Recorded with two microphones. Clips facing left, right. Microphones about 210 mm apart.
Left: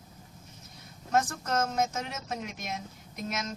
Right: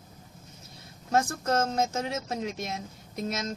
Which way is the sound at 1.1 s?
30° right (ahead or behind).